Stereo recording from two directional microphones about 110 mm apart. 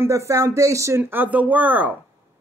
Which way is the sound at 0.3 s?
25° right (ahead or behind).